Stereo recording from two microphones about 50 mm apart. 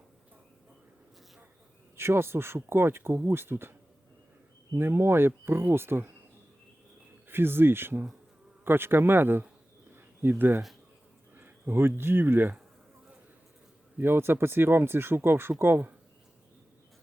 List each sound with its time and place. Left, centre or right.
2.0 s speech: right
4.8 s speech: right
7.3 s speech: right
14.0 s speech: right